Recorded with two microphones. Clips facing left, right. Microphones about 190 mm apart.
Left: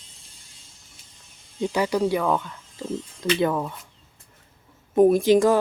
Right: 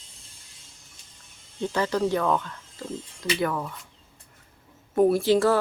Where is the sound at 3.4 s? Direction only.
20° left (ahead or behind).